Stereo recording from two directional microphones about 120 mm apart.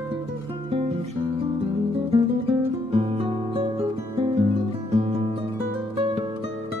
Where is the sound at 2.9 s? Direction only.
50° right (ahead or behind).